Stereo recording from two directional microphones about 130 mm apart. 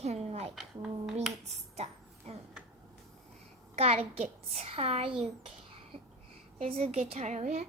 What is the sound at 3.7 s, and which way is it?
A child's voice, 50° right (ahead or behind).